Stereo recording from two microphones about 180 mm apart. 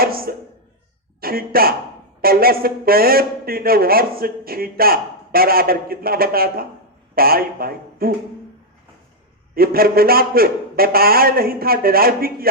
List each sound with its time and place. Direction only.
0.0 s a sound: 55° right (ahead or behind)
1.2 s a man's voice: 55° right (ahead or behind)
9.6 s a man's voice: 55° right (ahead or behind)